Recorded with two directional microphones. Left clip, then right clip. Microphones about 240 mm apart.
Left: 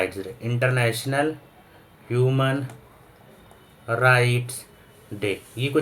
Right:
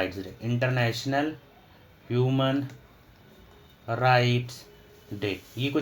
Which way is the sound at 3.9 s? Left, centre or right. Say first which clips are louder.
Left 4 dB; right.